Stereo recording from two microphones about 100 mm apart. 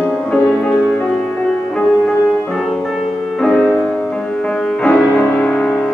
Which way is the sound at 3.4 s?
10° left (ahead or behind).